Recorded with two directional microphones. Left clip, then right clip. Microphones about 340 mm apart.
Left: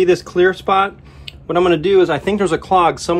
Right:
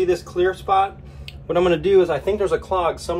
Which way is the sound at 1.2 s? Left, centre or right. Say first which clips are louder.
Left 4 dB; centre.